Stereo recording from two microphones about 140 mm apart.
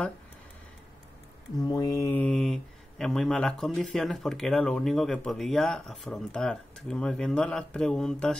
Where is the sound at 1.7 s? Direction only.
25° left (ahead or behind).